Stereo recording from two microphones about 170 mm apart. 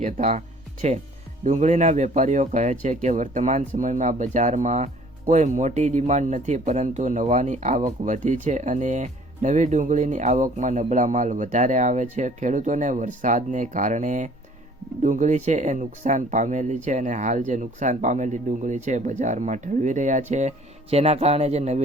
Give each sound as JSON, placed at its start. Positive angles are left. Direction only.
{"t": 0.0, "sound": "speech", "side_deg": -45}